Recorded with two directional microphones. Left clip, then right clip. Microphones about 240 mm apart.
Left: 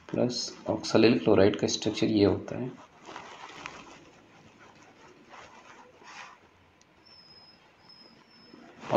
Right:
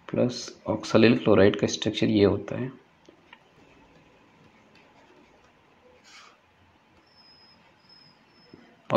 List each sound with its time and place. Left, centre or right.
0.0 s speech: right